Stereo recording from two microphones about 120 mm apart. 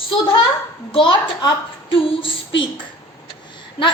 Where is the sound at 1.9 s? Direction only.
45° left (ahead or behind).